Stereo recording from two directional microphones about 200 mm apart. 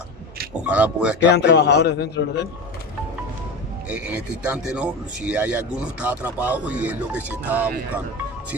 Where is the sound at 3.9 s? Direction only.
5° right (ahead or behind).